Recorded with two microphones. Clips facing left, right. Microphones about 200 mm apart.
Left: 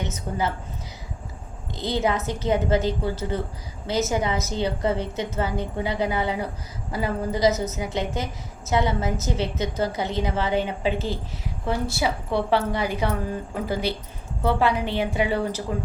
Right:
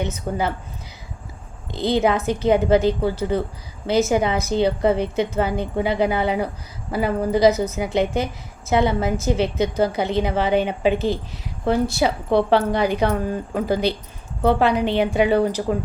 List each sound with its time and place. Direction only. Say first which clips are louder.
0.0 s a woman's voice: right 4 dB; 15° right (ahead or behind)
1.7 s a woman's voice: right 5 dB; 15° right (ahead or behind)